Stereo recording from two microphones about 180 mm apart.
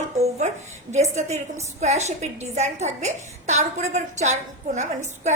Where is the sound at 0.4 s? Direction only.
40° right (ahead or behind).